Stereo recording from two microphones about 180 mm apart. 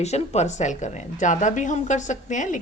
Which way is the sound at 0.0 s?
40° left (ahead or behind).